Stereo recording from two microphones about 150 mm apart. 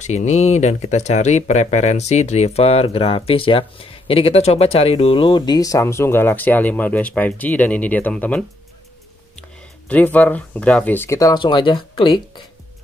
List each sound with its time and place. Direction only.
0.0 s speech: 50° left (ahead or behind); by 8.5 s 10° left (ahead or behind)
9.8 s speech: 10° left (ahead or behind); by 12.2 s 35° left (ahead or behind)